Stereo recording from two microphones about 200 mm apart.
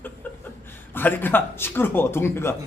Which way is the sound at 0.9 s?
10° left (ahead or behind).